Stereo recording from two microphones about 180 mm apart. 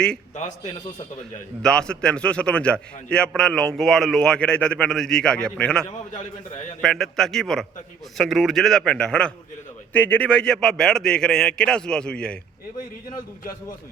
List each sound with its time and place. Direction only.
0.3 s a man's voice: 40° left (ahead or behind)
1.6 s a man's voice: 5° left (ahead or behind)
6.8 s a man's voice: centre (ahead or behind)